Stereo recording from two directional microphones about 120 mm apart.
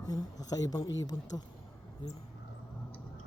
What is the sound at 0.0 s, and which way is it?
Speech, 30° left (ahead or behind).